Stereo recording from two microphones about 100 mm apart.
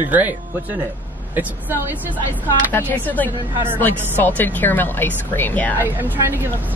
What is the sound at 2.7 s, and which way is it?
A woman's voice, 20° left (ahead or behind).